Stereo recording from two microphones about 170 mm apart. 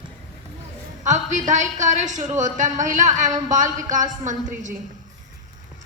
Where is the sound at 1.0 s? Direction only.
45° right (ahead or behind).